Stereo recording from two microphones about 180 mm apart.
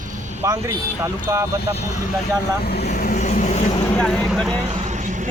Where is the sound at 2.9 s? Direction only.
45° left (ahead or behind).